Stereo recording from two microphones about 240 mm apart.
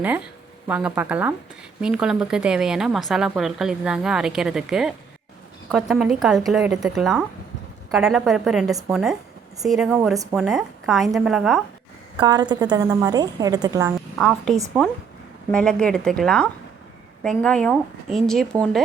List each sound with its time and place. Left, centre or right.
0.7 s a woman's voice: centre
12.2 s a woman's voice: centre
14.2 s a woman's voice: centre